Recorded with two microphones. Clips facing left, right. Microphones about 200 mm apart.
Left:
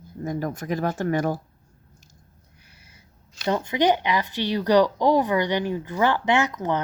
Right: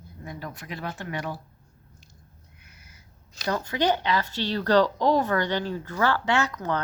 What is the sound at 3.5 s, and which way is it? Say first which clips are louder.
Speech: left 4 dB; 20° left (ahead or behind).